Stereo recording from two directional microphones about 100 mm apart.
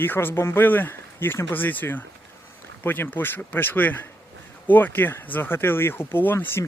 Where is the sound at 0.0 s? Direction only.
20° left (ahead or behind).